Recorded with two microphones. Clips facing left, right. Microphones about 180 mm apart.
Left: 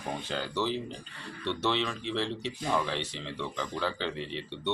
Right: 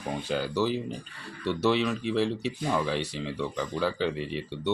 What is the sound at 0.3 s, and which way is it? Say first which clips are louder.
Speech: right 5 dB; 10° right (ahead or behind).